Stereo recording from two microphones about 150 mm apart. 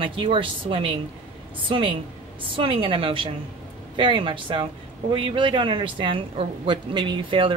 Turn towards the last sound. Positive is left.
turn(degrees=-35)  # may be behind; listen again after turning